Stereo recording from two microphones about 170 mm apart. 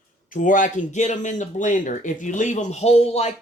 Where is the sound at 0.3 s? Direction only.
50° left (ahead or behind).